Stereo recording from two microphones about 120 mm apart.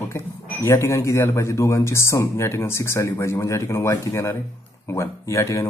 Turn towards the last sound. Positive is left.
turn(degrees=25)  # may be behind; listen again after turning